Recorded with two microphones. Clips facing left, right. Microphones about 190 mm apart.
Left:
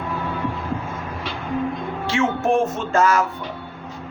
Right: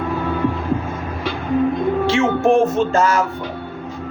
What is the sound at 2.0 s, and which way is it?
A man's voice, 25° right (ahead or behind).